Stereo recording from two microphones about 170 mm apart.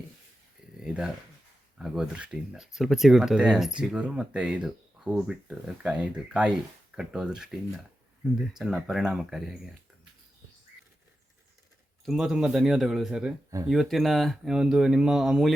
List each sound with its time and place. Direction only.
0.8 s a sound: 5° right (ahead or behind)
1.8 s speech: 5° right (ahead or behind)
12.0 s speech: 5° right (ahead or behind)
13.5 s speech: 20° right (ahead or behind)
13.9 s speech: centre (ahead or behind)